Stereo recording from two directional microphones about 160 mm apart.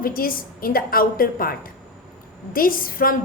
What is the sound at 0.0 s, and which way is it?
A woman's voice, 65° left (ahead or behind).